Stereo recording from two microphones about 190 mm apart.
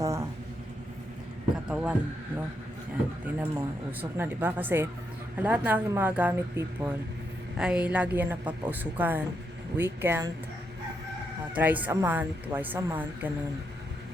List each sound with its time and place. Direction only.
0.0 s vehicle: 15° right (ahead or behind)
1.6 s a sound: 5° right (ahead or behind)
3.3 s speech: 10° right (ahead or behind)
11.5 s speech: 10° right (ahead or behind)